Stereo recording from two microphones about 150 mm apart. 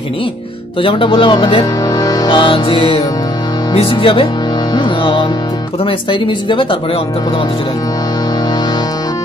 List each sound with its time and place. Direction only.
0.8 s speech: 35° left (ahead or behind)
1.9 s music: 25° left (ahead or behind)
3.7 s speech: 35° left (ahead or behind)
4.7 s music: 35° left (ahead or behind)
5.9 s speech: 35° left (ahead or behind)